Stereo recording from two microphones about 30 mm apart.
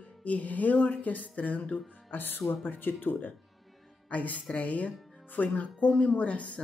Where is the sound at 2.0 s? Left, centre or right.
Left.